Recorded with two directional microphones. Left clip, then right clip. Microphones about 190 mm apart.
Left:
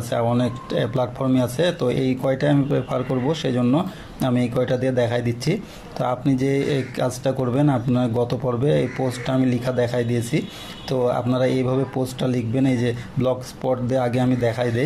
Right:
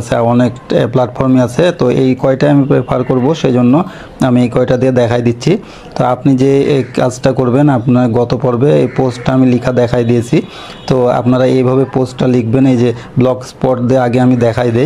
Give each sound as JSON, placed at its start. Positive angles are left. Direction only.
{"t": 0.1, "sound": "a man's voice", "side_deg": -15}